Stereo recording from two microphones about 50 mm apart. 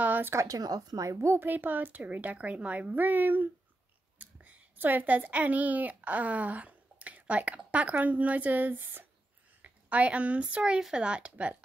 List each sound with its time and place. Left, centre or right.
0.0 s a sound: right
1.0 s a woman's voice: right
1.4 s a woman's voice: right
9.6 s speech: right